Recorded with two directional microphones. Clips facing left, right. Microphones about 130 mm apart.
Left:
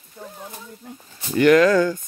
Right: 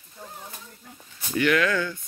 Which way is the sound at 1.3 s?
40° left (ahead or behind).